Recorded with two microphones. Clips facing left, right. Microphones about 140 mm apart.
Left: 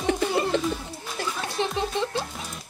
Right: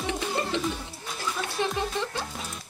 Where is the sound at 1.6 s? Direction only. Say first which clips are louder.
Left 1 dB; 25° left (ahead or behind).